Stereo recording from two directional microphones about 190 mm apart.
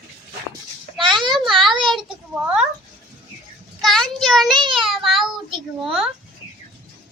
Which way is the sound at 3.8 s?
Centre (ahead or behind).